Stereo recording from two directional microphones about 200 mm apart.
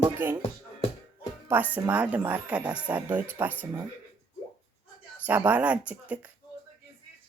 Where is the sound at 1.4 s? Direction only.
10° right (ahead or behind).